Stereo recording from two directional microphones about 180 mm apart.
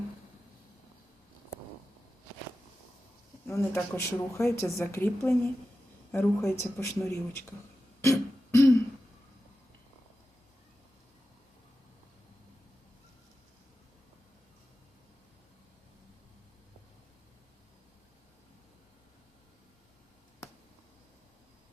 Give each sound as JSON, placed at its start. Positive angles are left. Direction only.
{"t": 3.4, "sound": "speech", "side_deg": 15}
{"t": 8.0, "sound": "throat clearing", "side_deg": 15}